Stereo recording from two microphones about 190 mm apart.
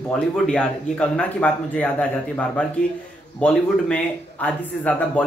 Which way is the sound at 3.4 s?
5° left (ahead or behind).